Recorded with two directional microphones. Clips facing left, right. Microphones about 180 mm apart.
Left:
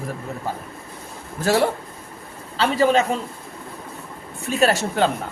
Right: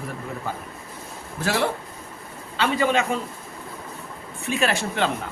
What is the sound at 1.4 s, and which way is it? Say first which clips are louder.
Speech: left 5 dB; 40° left (ahead or behind).